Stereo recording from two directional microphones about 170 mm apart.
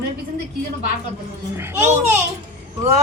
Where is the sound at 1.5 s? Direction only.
15° right (ahead or behind).